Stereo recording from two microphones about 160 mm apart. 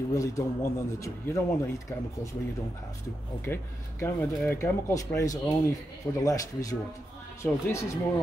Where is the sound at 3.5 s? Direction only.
15° left (ahead or behind).